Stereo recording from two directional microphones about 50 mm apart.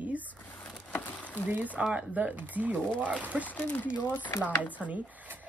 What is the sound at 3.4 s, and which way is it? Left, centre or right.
Speech, left.